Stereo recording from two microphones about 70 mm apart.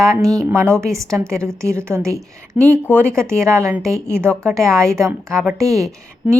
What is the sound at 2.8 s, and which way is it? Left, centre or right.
Speech, left.